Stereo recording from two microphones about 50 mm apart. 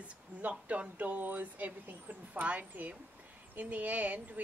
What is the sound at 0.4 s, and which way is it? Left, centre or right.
A woman's voice, right.